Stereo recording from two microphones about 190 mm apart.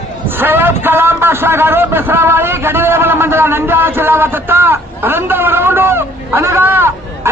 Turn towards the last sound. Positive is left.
turn(degrees=-10)  # may be behind; listen again after turning